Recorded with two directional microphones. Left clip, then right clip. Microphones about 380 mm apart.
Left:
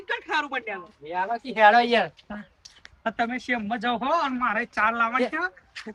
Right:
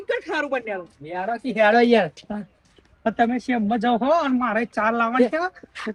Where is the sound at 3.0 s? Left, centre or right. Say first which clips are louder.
Right 5 dB; centre.